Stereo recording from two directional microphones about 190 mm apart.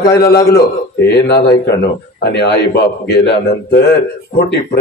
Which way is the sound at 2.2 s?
60° left (ahead or behind).